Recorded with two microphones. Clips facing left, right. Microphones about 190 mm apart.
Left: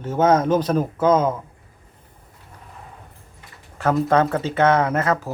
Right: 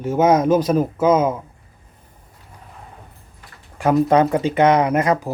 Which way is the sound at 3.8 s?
15° right (ahead or behind).